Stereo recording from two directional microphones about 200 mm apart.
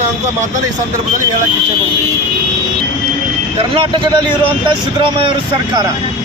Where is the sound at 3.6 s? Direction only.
25° right (ahead or behind).